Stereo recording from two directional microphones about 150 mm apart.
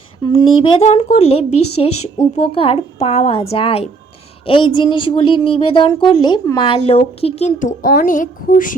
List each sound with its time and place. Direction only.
0.2 s speech: 30° left (ahead or behind); by 8.7 s 65° left (ahead or behind)